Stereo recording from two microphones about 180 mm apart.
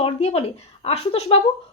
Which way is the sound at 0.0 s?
35° left (ahead or behind).